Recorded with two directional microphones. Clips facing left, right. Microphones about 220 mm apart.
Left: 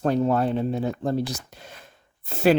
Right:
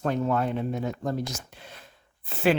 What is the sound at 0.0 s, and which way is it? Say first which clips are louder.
Speech: left 4 dB; 35° left (ahead or behind).